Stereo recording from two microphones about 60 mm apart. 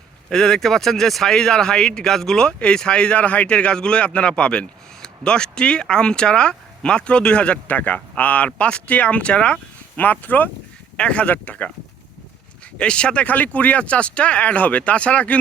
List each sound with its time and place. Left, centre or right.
0.3 s speech: centre
10.0 s speech: left
12.8 s speech: centre